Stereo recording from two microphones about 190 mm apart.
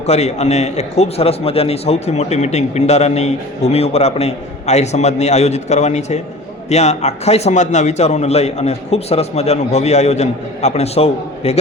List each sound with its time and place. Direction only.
0.0 s a man's voice: 35° left (ahead or behind)